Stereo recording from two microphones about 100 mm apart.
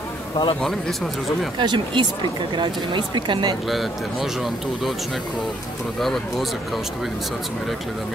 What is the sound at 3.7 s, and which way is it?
Speech, centre (ahead or behind).